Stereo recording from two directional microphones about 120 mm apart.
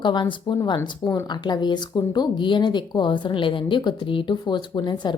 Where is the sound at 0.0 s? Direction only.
40° left (ahead or behind).